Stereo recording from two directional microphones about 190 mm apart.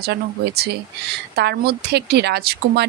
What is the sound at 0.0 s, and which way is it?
Speech, 55° right (ahead or behind).